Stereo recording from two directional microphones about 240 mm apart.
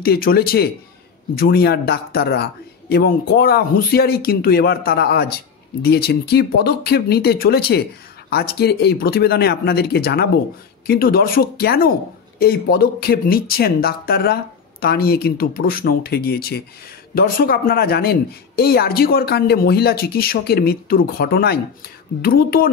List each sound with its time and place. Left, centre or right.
0.0 s speech: left